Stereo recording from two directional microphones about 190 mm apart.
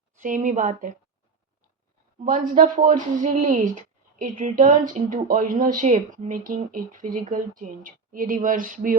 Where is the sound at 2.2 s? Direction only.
45° right (ahead or behind).